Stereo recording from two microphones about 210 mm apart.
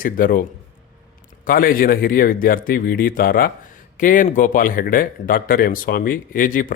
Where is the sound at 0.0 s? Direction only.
40° left (ahead or behind).